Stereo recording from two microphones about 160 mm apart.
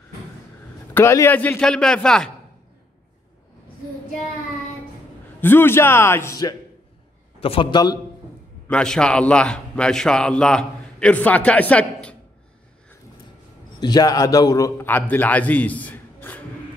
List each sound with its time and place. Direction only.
0.9 s a man's voice: 15° left (ahead or behind)
5.4 s speech: 15° left (ahead or behind)
7.3 s a man's voice: 35° left (ahead or behind)
8.6 s speech: 5° left (ahead or behind)
13.7 s a man's voice: 25° left (ahead or behind)